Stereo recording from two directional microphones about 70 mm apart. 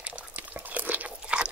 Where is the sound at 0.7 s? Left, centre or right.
Right.